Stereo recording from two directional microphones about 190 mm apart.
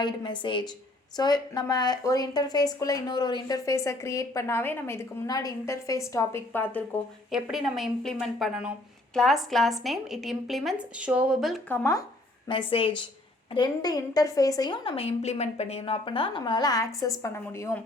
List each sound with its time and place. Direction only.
0.0 s a woman's voice: 25° left (ahead or behind)
7.3 s a woman's voice: centre (ahead or behind)
11.7 s a woman's voice: 15° left (ahead or behind)
12.5 s a woman's voice: 30° left (ahead or behind)